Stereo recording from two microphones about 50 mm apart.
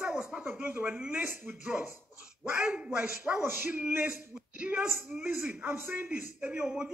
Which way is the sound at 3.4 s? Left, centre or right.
Right.